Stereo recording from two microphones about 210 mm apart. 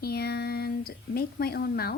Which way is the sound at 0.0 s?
50° left (ahead or behind).